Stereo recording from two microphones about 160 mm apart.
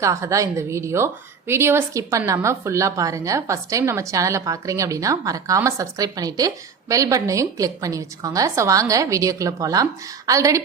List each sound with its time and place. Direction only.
0.0 s a woman's voice: 20° right (ahead or behind)